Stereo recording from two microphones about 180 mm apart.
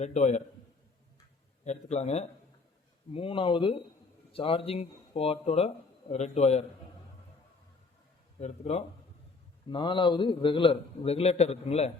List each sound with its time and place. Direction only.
0.0 s speech: 40° left (ahead or behind)
1.6 s a man's voice: 40° left (ahead or behind)
8.4 s speech: 40° left (ahead or behind)
9.6 s a man's voice: 25° left (ahead or behind)